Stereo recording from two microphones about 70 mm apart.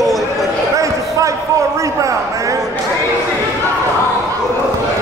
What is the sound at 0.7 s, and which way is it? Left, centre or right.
Basketball bounce, right.